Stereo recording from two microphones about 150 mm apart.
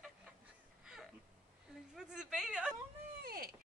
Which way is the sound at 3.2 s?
75° right (ahead or behind).